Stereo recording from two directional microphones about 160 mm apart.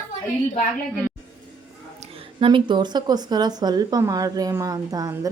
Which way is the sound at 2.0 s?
35° right (ahead or behind).